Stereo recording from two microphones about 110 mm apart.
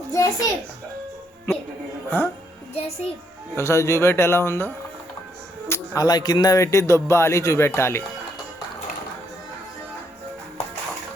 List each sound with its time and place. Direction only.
0.1 s a child's voice: 30° left (ahead or behind)
2.0 s a man's voice: 20° left (ahead or behind)
2.7 s a child's voice: 70° left (ahead or behind)
3.5 s a man's voice: 25° left (ahead or behind)